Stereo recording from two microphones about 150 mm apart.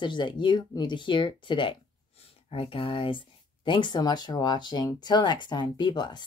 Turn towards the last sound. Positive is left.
turn(degrees=30)  # may be behind; listen again after turning